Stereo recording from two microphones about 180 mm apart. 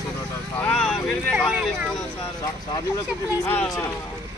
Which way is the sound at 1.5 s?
5° right (ahead or behind).